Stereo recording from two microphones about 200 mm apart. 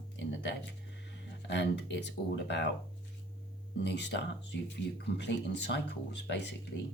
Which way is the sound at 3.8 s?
60° left (ahead or behind).